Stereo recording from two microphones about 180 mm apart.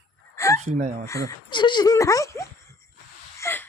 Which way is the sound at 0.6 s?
45° right (ahead or behind).